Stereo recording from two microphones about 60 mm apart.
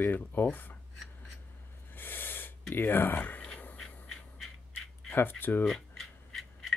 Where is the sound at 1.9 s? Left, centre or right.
Left.